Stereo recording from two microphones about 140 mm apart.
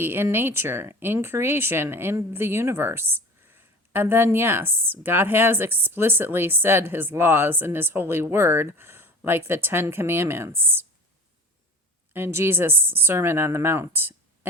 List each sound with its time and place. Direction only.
0.0 s speech: 15° right (ahead or behind)
12.1 s speech: 15° right (ahead or behind)